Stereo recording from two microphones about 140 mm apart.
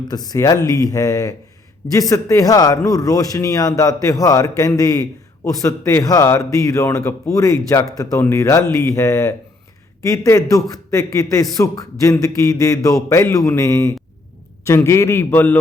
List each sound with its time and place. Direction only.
0.1 s a man's voice: 30° left (ahead or behind)